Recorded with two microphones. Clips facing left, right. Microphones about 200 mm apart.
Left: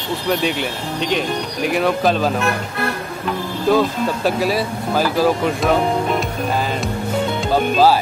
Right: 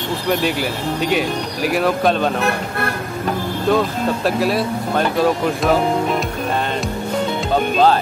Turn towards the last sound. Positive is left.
turn(degrees=5)  # may be behind; listen again after turning